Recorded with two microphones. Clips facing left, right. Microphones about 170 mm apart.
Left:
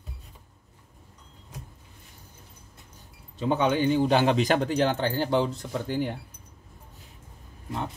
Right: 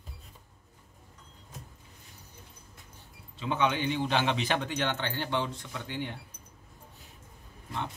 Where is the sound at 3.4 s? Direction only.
40° left (ahead or behind).